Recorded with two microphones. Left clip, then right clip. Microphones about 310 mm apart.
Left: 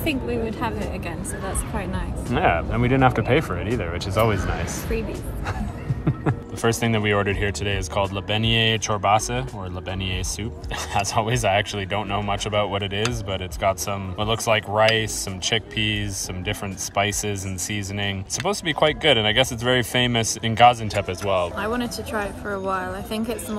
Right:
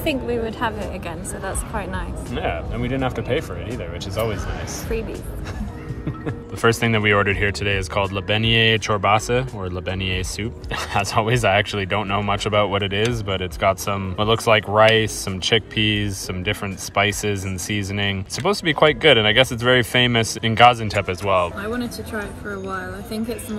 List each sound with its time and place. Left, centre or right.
0.0 s speech: centre
2.3 s speech: centre
6.6 s speech: centre